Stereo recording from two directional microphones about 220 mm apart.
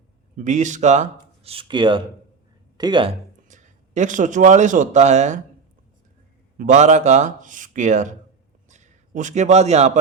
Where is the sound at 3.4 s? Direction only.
35° right (ahead or behind).